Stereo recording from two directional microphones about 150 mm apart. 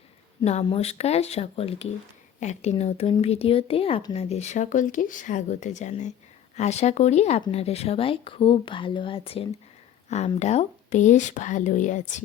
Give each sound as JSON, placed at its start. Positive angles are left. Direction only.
{"t": 0.6, "sound": "speech", "side_deg": 40}